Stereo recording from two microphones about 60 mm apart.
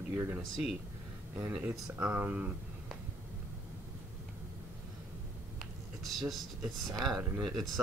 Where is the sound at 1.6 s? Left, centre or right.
Right.